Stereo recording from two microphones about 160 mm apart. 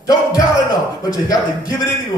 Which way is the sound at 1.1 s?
20° left (ahead or behind).